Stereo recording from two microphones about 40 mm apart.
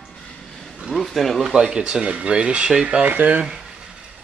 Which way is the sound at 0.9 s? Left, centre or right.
Centre.